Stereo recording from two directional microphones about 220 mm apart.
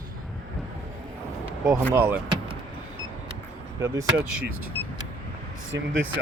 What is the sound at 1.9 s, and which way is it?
Speech, 10° right (ahead or behind).